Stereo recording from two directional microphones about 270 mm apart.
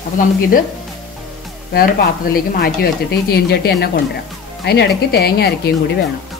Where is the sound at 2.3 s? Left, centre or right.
Left.